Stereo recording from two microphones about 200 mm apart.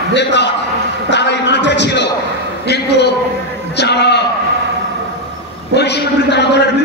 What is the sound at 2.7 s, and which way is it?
A man's voice, 55° left (ahead or behind).